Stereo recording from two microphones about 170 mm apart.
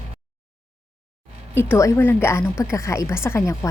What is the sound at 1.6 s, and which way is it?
A woman's voice, 15° left (ahead or behind).